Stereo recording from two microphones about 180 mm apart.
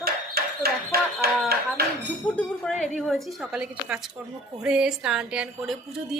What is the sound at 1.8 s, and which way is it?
Speech, 60° right (ahead or behind).